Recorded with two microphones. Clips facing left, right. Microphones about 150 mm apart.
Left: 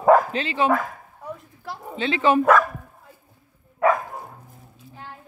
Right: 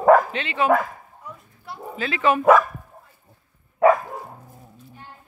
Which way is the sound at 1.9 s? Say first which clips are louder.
Left 2 dB; 30° left (ahead or behind).